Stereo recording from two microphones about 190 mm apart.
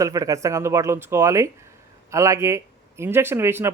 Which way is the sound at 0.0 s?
15° right (ahead or behind).